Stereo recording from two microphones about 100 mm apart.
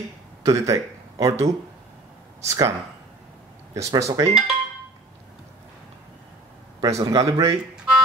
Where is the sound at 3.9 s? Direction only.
35° right (ahead or behind).